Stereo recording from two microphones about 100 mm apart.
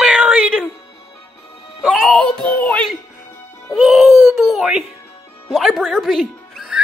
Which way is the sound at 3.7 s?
Centre (ahead or behind).